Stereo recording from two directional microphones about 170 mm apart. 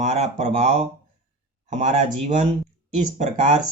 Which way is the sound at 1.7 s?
45° right (ahead or behind).